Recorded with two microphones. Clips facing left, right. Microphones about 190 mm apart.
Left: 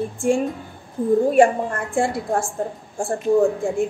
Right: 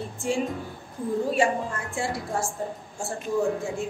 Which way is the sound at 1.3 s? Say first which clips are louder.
Left 8 dB; 55° left (ahead or behind).